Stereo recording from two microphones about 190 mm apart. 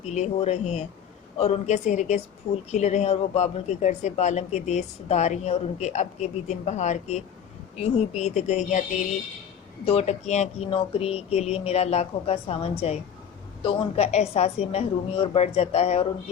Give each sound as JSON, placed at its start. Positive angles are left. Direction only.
{"t": 0.0, "sound": "speech", "side_deg": 35}